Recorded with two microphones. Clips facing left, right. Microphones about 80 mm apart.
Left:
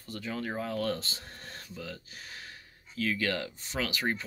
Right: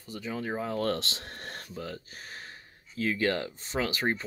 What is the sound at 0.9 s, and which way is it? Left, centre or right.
Speech, right.